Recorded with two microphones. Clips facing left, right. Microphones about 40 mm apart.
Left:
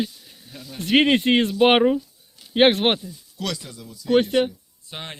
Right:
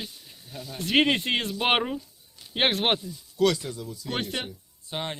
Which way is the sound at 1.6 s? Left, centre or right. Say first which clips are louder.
Left 9 dB; centre.